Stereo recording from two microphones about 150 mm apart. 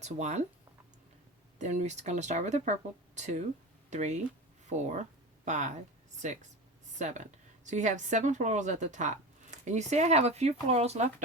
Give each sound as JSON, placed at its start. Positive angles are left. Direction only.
{"t": 0.0, "sound": "speech", "side_deg": -50}
{"t": 1.5, "sound": "speech", "side_deg": -55}
{"t": 7.0, "sound": "speech", "side_deg": -55}